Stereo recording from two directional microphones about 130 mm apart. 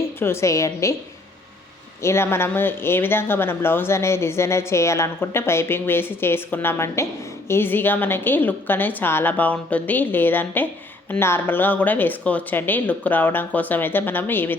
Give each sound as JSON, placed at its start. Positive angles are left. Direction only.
{"t": 0.2, "sound": "a woman's voice", "side_deg": 20}
{"t": 2.0, "sound": "speech", "side_deg": 20}